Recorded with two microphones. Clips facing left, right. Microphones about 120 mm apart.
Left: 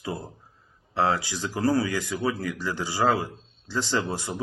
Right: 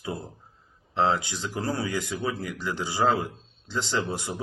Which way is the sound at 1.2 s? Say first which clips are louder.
Left 5 dB; 15° right (ahead or behind).